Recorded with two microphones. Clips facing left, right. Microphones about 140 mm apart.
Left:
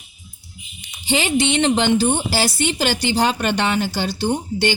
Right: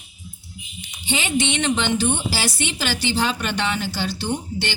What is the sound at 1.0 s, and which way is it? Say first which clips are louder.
A woman's voice: left 4 dB; 35° left (ahead or behind).